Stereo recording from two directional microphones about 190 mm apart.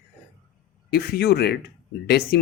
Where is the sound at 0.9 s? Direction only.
55° left (ahead or behind).